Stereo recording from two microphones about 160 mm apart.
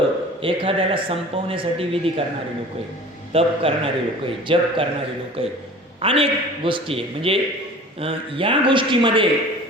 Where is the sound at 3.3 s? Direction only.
35° right (ahead or behind).